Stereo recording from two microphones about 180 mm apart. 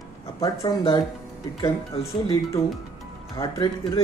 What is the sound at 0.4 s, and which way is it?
Speech, 20° left (ahead or behind).